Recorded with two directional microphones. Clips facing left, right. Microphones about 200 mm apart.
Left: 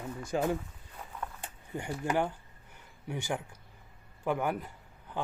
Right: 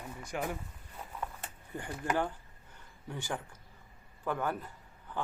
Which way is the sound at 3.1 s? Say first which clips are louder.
Left 4 dB; 15° left (ahead or behind).